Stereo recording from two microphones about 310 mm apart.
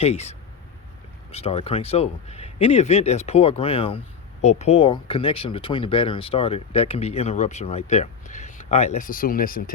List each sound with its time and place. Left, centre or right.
0.0 s speech: centre